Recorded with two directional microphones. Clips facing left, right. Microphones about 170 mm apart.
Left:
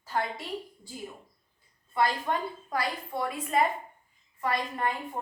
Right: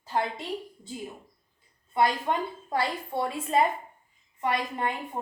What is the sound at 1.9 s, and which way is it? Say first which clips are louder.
A woman's voice: right 2 dB; 20° right (ahead or behind).